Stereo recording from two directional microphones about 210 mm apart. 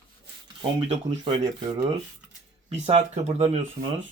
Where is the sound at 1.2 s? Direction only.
20° right (ahead or behind).